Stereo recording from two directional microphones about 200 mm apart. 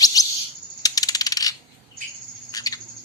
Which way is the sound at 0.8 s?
20° left (ahead or behind).